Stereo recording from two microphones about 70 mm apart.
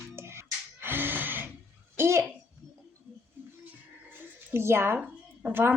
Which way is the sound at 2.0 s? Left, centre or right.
Right.